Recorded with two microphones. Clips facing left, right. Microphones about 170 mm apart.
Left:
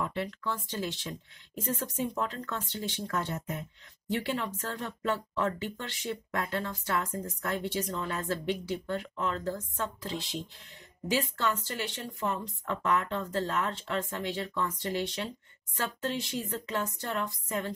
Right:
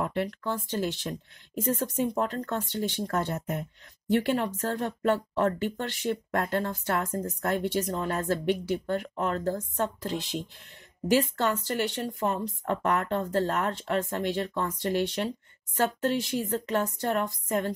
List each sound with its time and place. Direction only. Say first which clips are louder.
0.0 s speech: right 4 dB; 45° right (ahead or behind)
11.1 s speech: right 4 dB; 50° right (ahead or behind)